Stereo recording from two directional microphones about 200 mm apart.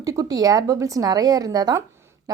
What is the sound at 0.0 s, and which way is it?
A woman's voice, 15° right (ahead or behind).